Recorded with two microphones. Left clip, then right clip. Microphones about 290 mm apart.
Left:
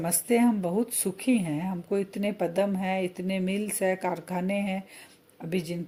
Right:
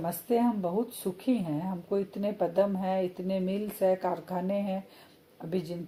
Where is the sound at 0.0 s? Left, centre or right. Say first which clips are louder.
Left 3 dB; left.